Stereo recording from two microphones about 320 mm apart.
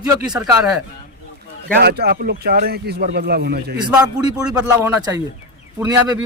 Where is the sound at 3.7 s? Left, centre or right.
Centre.